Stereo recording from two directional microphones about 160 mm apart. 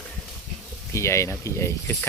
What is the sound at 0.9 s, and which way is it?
Speech, 15° left (ahead or behind).